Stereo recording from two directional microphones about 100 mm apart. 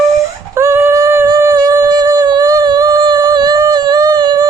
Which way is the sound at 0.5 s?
25° right (ahead or behind).